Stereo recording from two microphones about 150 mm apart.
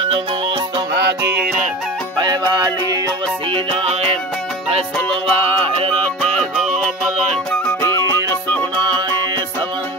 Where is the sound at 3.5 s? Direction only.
45° right (ahead or behind).